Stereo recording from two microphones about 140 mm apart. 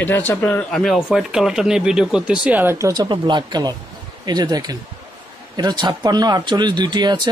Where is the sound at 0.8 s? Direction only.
Centre (ahead or behind).